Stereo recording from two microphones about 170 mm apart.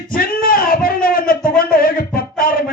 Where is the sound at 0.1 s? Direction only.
60° left (ahead or behind).